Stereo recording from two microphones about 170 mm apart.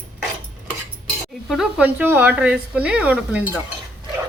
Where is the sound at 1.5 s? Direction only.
5° right (ahead or behind).